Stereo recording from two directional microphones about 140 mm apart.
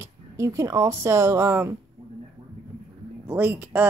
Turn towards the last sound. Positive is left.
turn(degrees=-10)  # may be behind; listen again after turning